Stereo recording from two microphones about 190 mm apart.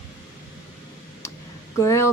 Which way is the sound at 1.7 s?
15° left (ahead or behind).